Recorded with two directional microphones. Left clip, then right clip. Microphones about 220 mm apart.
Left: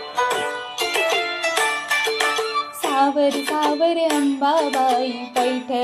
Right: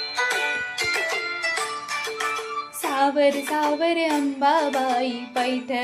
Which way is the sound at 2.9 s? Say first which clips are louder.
Left 2 dB; 10° left (ahead or behind).